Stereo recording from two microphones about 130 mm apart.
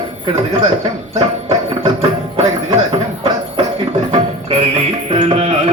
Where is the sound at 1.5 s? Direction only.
45° right (ahead or behind).